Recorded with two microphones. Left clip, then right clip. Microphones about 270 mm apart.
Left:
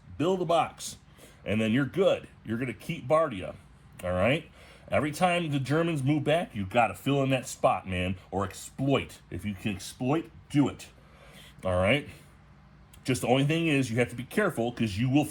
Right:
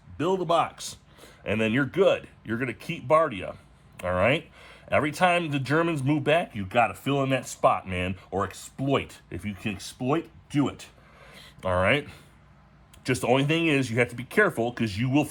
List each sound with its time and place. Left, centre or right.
0.2 s speech: centre
1.5 s speech: right
13.2 s speech: right